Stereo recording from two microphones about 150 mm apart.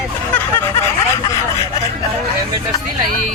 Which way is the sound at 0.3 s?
15° left (ahead or behind).